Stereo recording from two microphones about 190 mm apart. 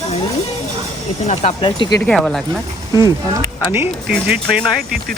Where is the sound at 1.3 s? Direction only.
35° left (ahead or behind).